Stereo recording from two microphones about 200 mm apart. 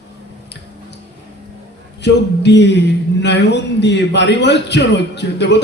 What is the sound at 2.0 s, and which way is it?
A man's voice, 60° left (ahead or behind).